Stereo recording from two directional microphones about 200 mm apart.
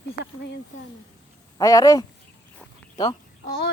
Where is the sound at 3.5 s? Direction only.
50° left (ahead or behind).